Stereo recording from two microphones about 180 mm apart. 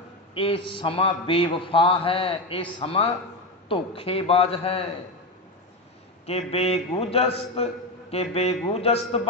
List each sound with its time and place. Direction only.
0.3 s a man's voice: 30° left (ahead or behind)
6.2 s a man's voice: 35° left (ahead or behind)